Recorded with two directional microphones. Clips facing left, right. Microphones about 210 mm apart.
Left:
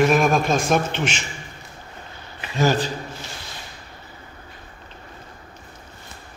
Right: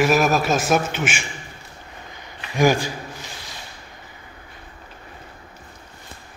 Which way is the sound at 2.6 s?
10° right (ahead or behind).